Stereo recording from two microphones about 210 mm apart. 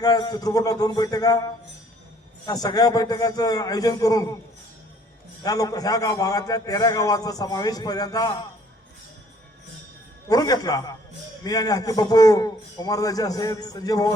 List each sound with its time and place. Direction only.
0.0 s a man's voice: 20° left (ahead or behind)
5.4 s a man's voice: 15° left (ahead or behind)
10.2 s a man's voice: 20° left (ahead or behind)